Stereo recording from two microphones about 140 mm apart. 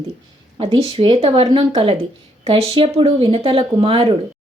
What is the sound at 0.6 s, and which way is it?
Speech, 40° right (ahead or behind).